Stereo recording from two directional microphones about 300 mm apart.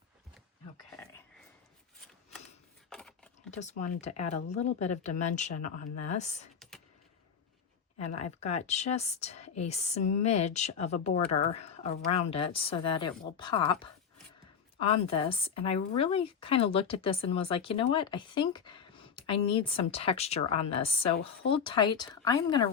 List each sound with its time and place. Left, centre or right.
2.9 s a sound: centre
3.5 s speech: left
6.6 s computer keyboard: centre
8.2 s speech: left